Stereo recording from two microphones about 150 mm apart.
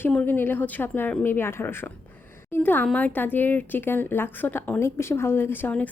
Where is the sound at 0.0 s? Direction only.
10° left (ahead or behind).